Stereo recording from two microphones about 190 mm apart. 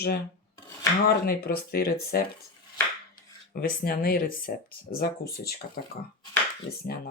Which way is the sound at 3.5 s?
50° left (ahead or behind).